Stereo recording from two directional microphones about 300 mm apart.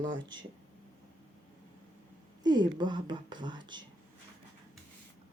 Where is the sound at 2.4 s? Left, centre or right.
Centre.